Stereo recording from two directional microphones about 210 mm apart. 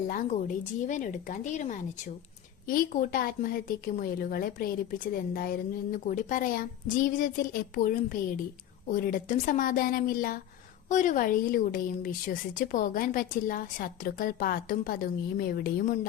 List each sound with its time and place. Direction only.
0.1 s a woman's voice: 40° left (ahead or behind)